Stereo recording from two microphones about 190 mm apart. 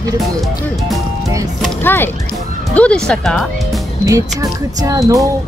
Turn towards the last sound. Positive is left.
turn(degrees=-15)  # may be behind; listen again after turning